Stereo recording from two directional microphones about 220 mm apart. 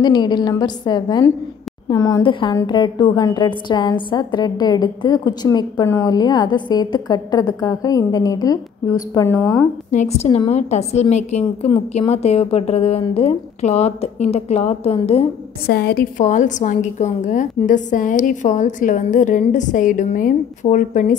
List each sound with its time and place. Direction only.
0.0 s a woman's voice: 20° left (ahead or behind)
9.8 s a woman's voice: 30° left (ahead or behind)
15.6 s a woman's voice: 45° left (ahead or behind)